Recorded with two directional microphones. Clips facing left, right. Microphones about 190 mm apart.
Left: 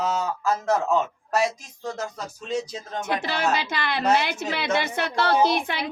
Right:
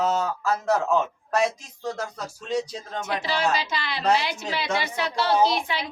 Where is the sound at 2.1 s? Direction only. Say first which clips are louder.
Even; centre (ahead or behind).